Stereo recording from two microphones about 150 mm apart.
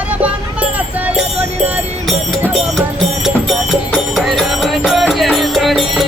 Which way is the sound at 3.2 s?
Centre (ahead or behind).